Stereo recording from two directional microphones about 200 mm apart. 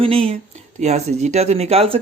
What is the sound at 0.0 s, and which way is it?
Speech, 30° right (ahead or behind).